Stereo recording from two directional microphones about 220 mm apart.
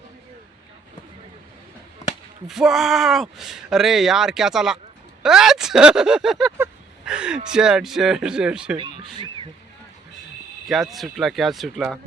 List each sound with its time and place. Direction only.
2.5 s speech: centre (ahead or behind)
8.8 s speech: 20° right (ahead or behind)
10.7 s speech: centre (ahead or behind)